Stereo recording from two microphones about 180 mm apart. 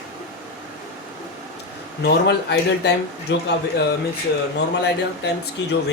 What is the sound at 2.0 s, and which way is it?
Speech, 70° left (ahead or behind).